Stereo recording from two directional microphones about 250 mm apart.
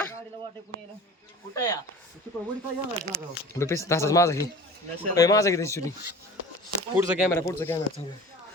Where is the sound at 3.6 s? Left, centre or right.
Centre.